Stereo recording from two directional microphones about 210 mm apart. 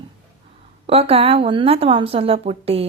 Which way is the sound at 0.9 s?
30° right (ahead or behind).